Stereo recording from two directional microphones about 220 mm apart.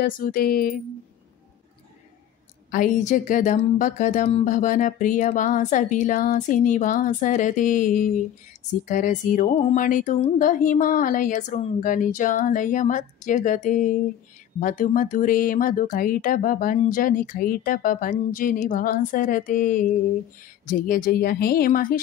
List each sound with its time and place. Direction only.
0.0 s speech: 40° left (ahead or behind)
2.7 s speech: 35° left (ahead or behind)